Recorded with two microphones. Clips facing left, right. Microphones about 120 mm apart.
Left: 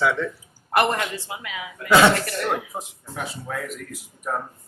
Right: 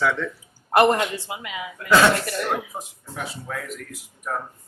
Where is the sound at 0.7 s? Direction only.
25° right (ahead or behind).